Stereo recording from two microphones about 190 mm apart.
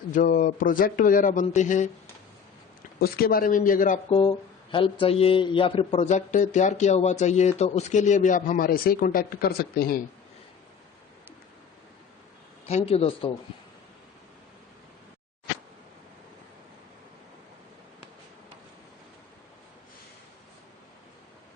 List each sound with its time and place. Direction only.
0.1 s speech: 45° left (ahead or behind)
3.0 s speech: 50° left (ahead or behind)
4.2 s speech: 25° left (ahead or behind); by 10.0 s 50° left (ahead or behind)
12.6 s speech: 35° left (ahead or behind)